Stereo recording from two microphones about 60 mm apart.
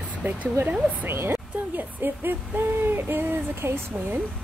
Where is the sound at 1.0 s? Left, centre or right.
Right.